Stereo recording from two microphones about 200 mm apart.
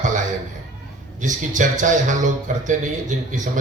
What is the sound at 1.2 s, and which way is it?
Speech, 40° right (ahead or behind).